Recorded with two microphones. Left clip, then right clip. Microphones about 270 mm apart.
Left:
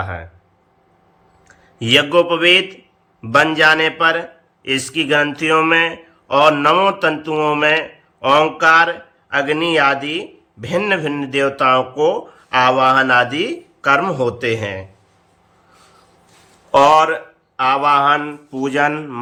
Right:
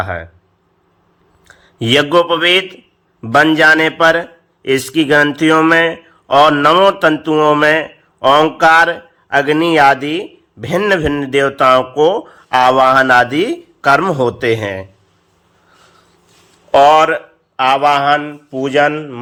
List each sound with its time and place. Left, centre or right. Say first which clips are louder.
0.0 s a man's voice: right 6 dB; centre
1.5 s a man's voice: right 2 dB; centre
16.7 s a man's voice: right 3 dB; centre